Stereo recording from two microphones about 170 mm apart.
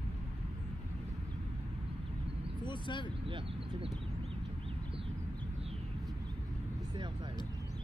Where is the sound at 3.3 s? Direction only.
30° right (ahead or behind).